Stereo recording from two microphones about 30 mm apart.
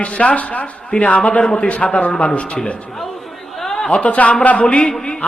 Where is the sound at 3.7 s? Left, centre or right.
Left.